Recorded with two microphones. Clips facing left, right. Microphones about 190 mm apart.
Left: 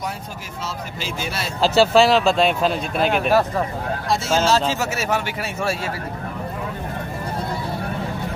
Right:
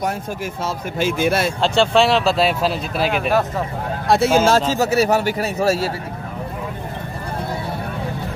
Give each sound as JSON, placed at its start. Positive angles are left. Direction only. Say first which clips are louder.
{"t": 0.7, "sound": "speech", "louder": "right 9 dB", "side_deg": -55}
{"t": 1.6, "sound": "speech", "louder": "left 3 dB", "side_deg": 0}
{"t": 4.1, "sound": "speech", "louder": "right 7 dB", "side_deg": -60}
{"t": 4.5, "sound": "speech", "louder": "right 4 dB", "side_deg": -45}